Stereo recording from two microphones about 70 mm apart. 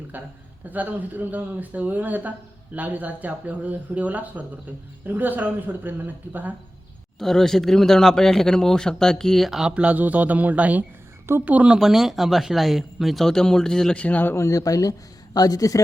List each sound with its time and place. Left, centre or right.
0.7 s speech: right
7.2 s speech: centre
9.6 s speech: centre
11.8 s speech: centre
14.0 s speech: left
14.3 s speech: left